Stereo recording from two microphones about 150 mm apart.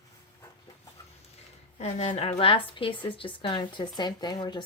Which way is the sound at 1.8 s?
45° left (ahead or behind).